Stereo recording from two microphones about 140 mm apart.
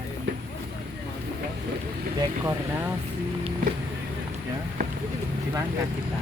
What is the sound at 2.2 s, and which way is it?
Speech, 25° right (ahead or behind).